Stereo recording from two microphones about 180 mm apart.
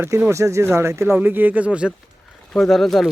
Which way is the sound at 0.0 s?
15° right (ahead or behind).